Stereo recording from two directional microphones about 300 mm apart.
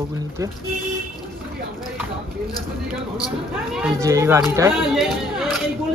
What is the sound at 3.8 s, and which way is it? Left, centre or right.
Speech, centre.